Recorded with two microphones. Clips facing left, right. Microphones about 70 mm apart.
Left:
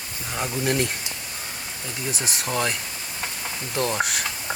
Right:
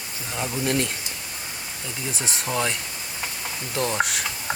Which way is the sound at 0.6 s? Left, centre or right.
Centre.